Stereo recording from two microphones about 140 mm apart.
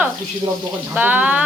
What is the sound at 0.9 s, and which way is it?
Speech, 10° right (ahead or behind).